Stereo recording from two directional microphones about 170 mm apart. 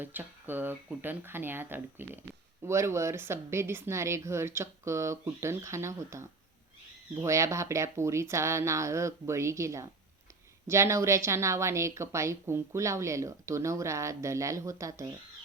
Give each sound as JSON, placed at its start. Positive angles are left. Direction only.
{"t": 0.0, "sound": "a woman's voice", "side_deg": -10}